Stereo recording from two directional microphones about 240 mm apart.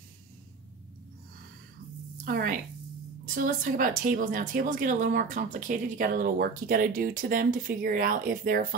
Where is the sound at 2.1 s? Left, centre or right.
Right.